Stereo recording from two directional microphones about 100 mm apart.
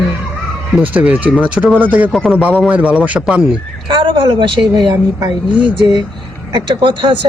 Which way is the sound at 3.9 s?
55° right (ahead or behind).